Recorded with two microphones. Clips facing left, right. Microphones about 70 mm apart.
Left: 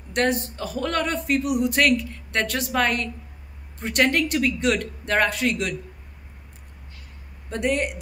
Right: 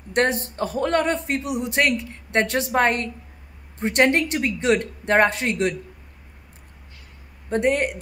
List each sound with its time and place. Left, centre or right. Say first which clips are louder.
0.1 s a man's voice: right 2 dB; right
7.4 s a man's voice: right 3 dB; right